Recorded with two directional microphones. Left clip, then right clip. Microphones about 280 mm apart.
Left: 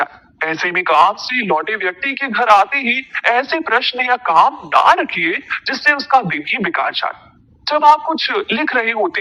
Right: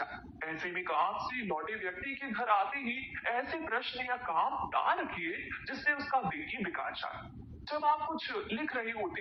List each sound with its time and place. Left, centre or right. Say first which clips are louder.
0.0 s a man's voice: left 19 dB; left